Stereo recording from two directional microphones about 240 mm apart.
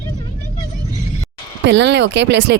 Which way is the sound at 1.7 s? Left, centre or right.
Right.